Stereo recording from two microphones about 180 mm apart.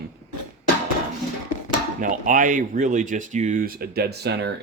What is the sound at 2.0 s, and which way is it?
Speech, 45° right (ahead or behind).